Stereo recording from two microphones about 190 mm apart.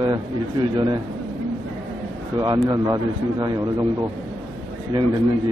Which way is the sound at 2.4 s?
20° right (ahead or behind).